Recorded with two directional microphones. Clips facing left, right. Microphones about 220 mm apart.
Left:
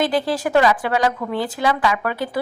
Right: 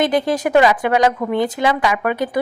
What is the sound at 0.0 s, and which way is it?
A woman's voice, 20° right (ahead or behind).